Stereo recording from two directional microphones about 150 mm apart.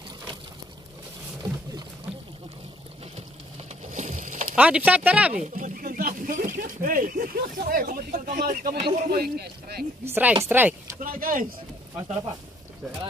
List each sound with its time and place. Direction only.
3.9 s a sound: 55° right (ahead or behind)
4.6 s speech: 10° right (ahead or behind)
5.3 s speech: 55° right (ahead or behind); by 8.7 s 75° right (ahead or behind)
8.7 s speech: 40° right (ahead or behind)
9.1 s speech: 90° right
10.0 s speech: 15° right (ahead or behind)
11.0 s speech: 70° right (ahead or behind)